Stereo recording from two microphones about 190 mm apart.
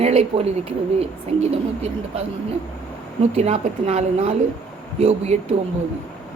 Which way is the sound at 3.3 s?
35° right (ahead or behind).